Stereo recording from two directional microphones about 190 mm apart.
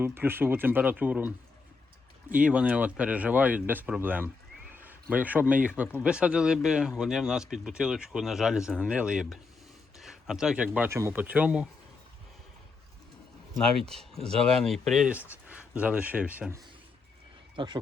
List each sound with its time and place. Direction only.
0.0 s speech: 10° right (ahead or behind)
2.4 s speech: 5° right (ahead or behind)
13.8 s speech: centre (ahead or behind)
17.6 s speech: 25° right (ahead or behind)